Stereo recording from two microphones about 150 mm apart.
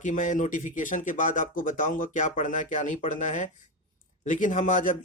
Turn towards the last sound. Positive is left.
turn(degrees=60)  # may be behind; listen again after turning